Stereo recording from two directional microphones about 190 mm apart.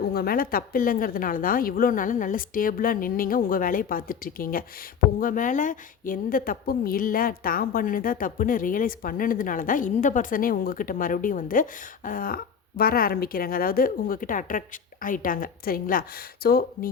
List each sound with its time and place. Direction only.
0.0 s speech: 55° left (ahead or behind)